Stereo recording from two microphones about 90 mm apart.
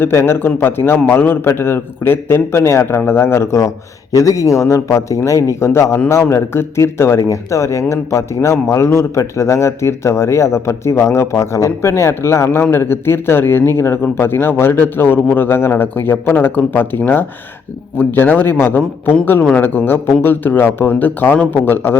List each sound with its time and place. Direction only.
0.0 s a man's voice: 30° left (ahead or behind)